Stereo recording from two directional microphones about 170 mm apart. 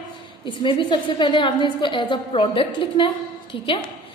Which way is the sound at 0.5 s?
30° left (ahead or behind).